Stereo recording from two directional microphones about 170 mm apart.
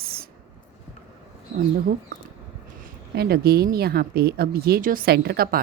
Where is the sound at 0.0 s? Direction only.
65° right (ahead or behind).